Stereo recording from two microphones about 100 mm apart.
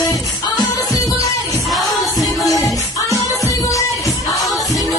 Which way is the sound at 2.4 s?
35° left (ahead or behind).